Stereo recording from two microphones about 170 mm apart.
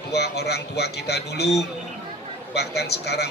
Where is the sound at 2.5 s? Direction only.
75° left (ahead or behind).